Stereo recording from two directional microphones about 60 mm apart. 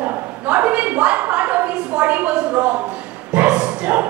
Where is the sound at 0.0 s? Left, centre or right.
Right.